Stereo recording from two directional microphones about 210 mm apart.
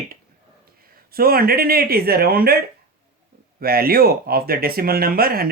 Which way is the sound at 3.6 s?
45° right (ahead or behind).